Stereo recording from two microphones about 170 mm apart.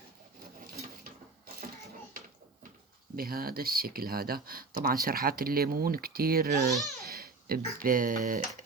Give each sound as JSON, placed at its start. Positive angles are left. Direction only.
{"t": 3.2, "sound": "speech", "side_deg": -60}
{"t": 6.7, "sound": "speech", "side_deg": 0}
{"t": 7.1, "sound": "babbling", "side_deg": -65}
{"t": 7.8, "sound": "speech", "side_deg": -55}